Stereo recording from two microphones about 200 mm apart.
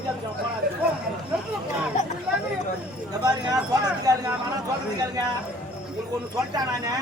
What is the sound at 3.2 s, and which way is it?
Speech, 20° right (ahead or behind).